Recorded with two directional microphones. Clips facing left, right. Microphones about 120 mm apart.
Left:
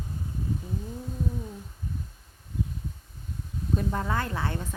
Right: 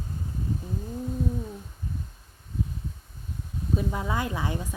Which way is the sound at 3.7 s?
5° right (ahead or behind).